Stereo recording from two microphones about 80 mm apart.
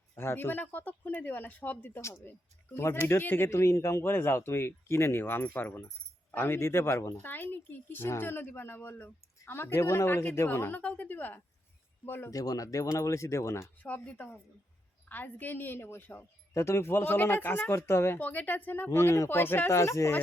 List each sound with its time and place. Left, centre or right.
0.2 s speech: left
2.7 s a man's voice: left
12.3 s a man's voice: left
13.8 s speech: centre
18.2 s speech: left
18.9 s a man's voice: left